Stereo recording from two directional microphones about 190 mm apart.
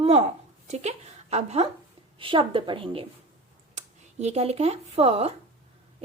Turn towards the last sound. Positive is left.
turn(degrees=-35)  # may be behind; listen again after turning